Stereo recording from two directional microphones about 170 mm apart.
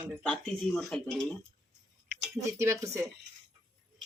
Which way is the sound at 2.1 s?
10° right (ahead or behind).